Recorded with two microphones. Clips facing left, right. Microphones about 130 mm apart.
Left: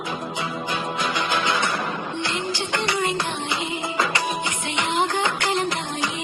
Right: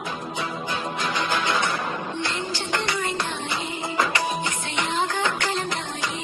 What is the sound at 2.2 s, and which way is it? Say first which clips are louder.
Music: left 2 dB; 20° left (ahead or behind).